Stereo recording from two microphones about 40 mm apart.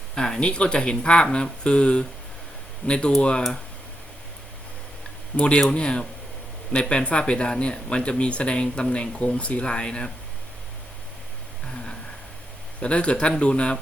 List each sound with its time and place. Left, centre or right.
0.1 s speech: centre
5.6 s speech: left
12.8 s speech: left